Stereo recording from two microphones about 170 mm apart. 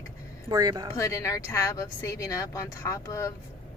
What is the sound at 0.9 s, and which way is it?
Speech, 20° left (ahead or behind).